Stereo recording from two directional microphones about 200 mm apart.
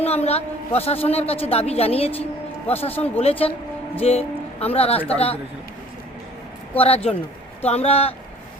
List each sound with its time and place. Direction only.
0.0 s a man's voice: 30° left (ahead or behind)
6.7 s a man's voice: 30° left (ahead or behind)